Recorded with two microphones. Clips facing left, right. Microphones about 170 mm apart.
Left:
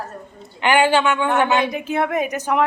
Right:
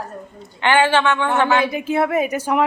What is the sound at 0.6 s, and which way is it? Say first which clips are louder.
A woman's voice: even; 15° left (ahead or behind).